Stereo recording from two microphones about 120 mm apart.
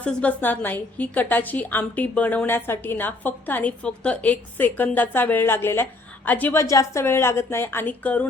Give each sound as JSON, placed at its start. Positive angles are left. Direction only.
{"t": 0.0, "sound": "a woman's voice", "side_deg": 10}
{"t": 6.6, "sound": "a woman's voice", "side_deg": 25}